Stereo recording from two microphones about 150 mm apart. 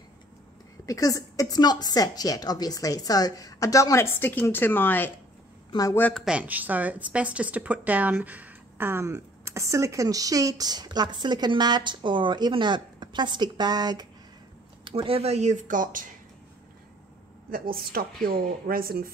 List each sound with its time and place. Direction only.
0.8 s a woman's voice: 25° left (ahead or behind)
5.7 s speech: 25° left (ahead or behind)
5.9 s speech: 10° left (ahead or behind)
6.2 s speech: 10° right (ahead or behind); by 16.1 s 60° right (ahead or behind)
17.5 s a woman's voice: 75° right (ahead or behind)